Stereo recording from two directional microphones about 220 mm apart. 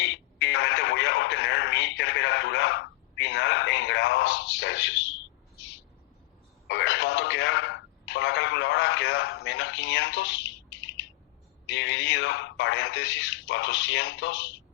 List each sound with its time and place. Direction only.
0.0 s radio: 55° left (ahead or behind)
6.7 s telephone: 55° left (ahead or behind)
11.7 s a sound: 55° left (ahead or behind)